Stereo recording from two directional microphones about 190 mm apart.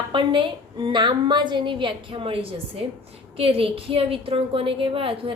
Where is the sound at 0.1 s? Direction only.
25° right (ahead or behind).